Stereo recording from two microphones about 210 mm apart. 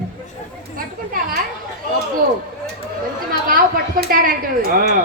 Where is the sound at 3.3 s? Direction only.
45° right (ahead or behind).